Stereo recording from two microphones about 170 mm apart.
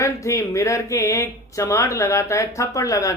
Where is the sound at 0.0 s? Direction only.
20° left (ahead or behind).